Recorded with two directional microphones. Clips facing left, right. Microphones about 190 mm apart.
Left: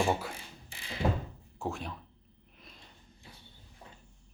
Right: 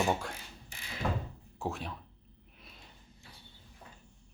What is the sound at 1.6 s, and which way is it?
Speech, centre (ahead or behind).